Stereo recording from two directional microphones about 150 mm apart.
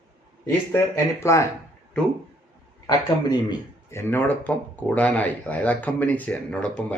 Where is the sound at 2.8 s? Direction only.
25° left (ahead or behind); by 6.7 s 10° left (ahead or behind).